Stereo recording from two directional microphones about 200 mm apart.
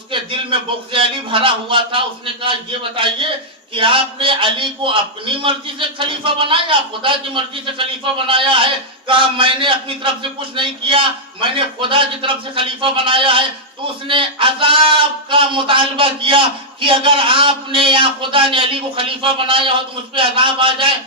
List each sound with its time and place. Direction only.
0.1 s a man's voice: 25° right (ahead or behind)